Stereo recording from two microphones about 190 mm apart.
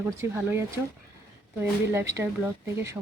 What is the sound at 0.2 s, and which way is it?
Speech, 15° right (ahead or behind).